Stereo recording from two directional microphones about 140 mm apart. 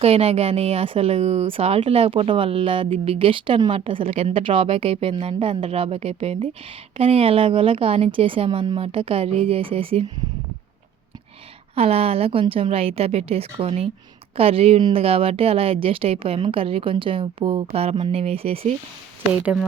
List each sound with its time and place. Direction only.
0.0 s speech: 50° right (ahead or behind)
11.7 s speech: 45° right (ahead or behind)
14.8 s speech: 30° right (ahead or behind)
15.0 s speech: 45° right (ahead or behind)